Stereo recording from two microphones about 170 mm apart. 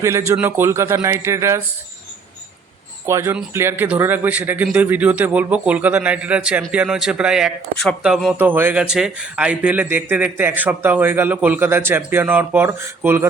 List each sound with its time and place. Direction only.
0.0 s speech: 15° right (ahead or behind)
3.1 s speech: 15° right (ahead or behind)